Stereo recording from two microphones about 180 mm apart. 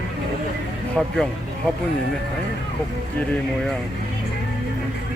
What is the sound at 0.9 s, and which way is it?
Speech, centre (ahead or behind).